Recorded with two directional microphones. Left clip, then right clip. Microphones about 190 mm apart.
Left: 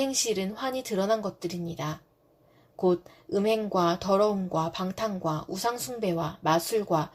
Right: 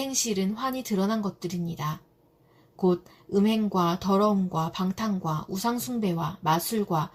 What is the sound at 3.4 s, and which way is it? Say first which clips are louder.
Speech: even; 45° left (ahead or behind).